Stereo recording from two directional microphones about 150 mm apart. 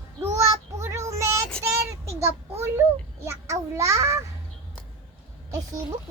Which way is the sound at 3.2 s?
15° right (ahead or behind).